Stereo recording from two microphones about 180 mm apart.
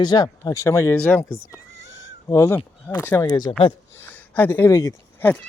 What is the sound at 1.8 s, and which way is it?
Cat, 90° left.